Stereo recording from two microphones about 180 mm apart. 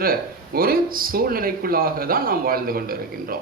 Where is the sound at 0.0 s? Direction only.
55° right (ahead or behind).